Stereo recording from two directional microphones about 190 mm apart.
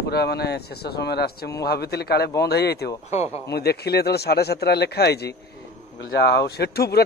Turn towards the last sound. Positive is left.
turn(degrees=55)  # may be behind; listen again after turning